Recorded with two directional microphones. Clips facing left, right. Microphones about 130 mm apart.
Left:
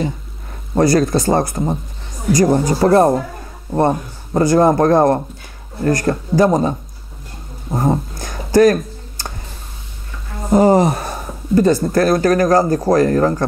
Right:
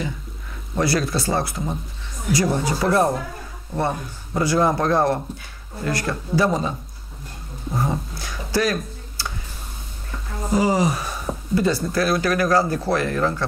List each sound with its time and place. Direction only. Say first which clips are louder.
0.7 s speech: left 8 dB; 45° left (ahead or behind)
7.7 s a sound: left 7 dB; 45° left (ahead or behind)
10.5 s speech: left 8 dB; 55° left (ahead or behind)